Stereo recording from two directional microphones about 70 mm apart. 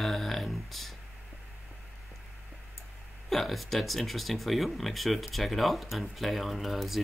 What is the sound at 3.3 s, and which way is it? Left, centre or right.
Speech, centre.